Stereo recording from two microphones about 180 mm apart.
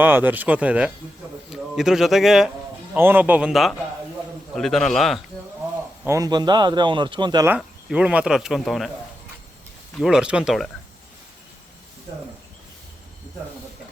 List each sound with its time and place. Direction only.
0.0 s speech: 10° right (ahead or behind)
6.1 s speech: 20° right (ahead or behind)
7.4 s speech: 10° right (ahead or behind)
10.0 s speech: 5° right (ahead or behind)